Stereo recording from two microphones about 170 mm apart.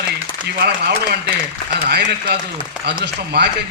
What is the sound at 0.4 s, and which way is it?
Speech, 70° right (ahead or behind).